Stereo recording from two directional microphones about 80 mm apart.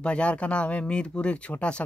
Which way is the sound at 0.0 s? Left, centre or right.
Centre.